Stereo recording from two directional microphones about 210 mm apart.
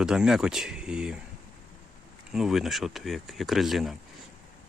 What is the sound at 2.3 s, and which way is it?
Speech, centre (ahead or behind).